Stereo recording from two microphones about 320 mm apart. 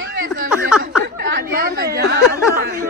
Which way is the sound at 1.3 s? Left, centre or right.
Right.